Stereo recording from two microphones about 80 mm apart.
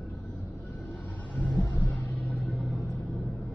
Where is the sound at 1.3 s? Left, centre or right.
Left.